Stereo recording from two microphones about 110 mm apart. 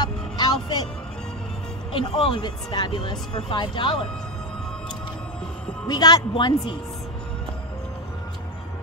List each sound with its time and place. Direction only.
0.0 s music: 40° left (ahead or behind)
1.9 s speech: 50° left (ahead or behind)
5.9 s speech: 35° left (ahead or behind)